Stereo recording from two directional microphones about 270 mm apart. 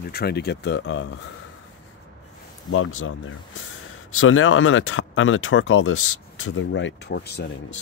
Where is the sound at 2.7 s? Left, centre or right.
Left.